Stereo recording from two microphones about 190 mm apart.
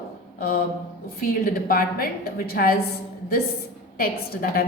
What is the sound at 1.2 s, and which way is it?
A woman's voice, 50° left (ahead or behind).